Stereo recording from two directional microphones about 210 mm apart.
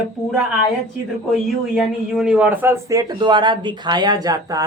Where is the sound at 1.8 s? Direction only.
5° right (ahead or behind).